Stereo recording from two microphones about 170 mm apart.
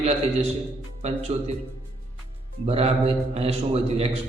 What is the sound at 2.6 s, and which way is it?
A man's voice, 35° right (ahead or behind).